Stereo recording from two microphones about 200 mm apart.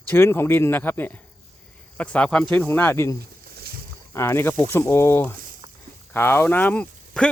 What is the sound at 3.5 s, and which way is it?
Boat, 50° right (ahead or behind).